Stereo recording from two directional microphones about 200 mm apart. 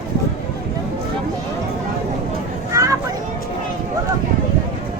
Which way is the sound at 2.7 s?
15° right (ahead or behind).